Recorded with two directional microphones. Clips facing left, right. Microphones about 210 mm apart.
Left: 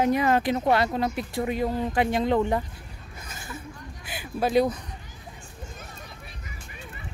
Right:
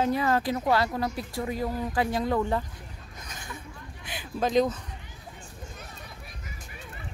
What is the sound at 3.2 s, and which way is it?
Chuckle, 5° left (ahead or behind).